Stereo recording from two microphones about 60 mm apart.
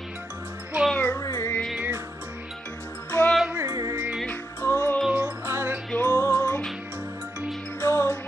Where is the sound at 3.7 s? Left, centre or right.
Right.